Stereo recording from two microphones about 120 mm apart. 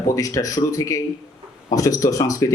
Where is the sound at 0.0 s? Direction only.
30° left (ahead or behind).